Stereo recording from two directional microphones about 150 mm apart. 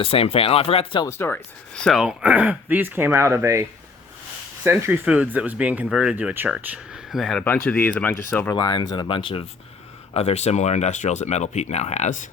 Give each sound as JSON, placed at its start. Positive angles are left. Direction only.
{"t": 0.0, "sound": "speech", "side_deg": 40}
{"t": 1.0, "sound": "speech", "side_deg": 15}
{"t": 8.5, "sound": "speech", "side_deg": 30}